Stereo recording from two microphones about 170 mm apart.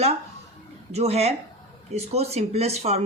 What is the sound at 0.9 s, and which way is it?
Speech, 40° right (ahead or behind).